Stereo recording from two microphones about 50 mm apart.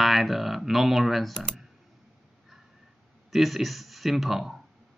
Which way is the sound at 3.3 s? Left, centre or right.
Centre.